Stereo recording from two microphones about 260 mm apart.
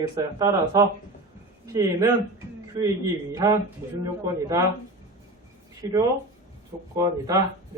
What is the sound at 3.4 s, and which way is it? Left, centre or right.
Speech, centre.